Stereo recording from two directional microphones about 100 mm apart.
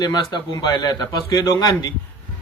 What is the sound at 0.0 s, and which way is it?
A man's voice, 40° left (ahead or behind).